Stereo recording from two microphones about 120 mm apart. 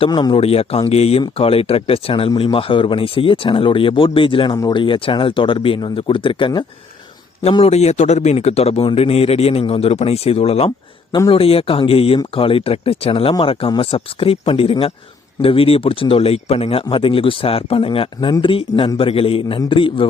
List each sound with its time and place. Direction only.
0.1 s a man's voice: 35° left (ahead or behind)
0.3 s speech: 55° left (ahead or behind)
7.6 s speech: 65° left (ahead or behind); by 20.1 s 45° left (ahead or behind)